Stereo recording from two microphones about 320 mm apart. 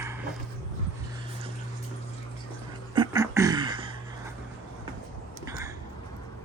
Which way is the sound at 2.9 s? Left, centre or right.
Centre.